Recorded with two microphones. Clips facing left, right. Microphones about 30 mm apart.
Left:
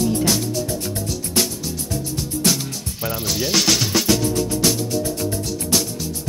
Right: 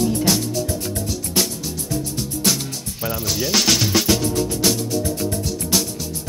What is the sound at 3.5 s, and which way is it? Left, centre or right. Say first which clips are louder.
Music: right 1 dB; centre.